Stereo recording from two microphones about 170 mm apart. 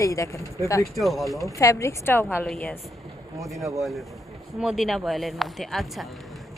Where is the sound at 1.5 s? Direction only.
20° left (ahead or behind).